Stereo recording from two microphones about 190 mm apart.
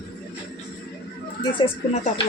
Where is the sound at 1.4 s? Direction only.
25° left (ahead or behind).